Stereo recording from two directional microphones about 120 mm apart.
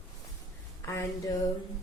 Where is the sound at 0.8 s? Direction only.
25° left (ahead or behind).